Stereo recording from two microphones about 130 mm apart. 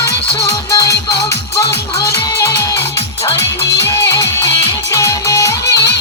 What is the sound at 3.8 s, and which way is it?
Music, 20° left (ahead or behind).